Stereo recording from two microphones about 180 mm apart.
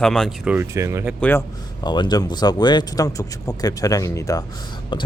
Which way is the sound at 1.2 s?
10° left (ahead or behind).